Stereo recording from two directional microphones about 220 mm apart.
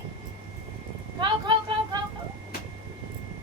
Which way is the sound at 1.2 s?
20° right (ahead or behind).